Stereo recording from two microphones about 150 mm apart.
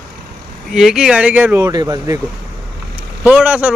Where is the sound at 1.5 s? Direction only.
20° right (ahead or behind).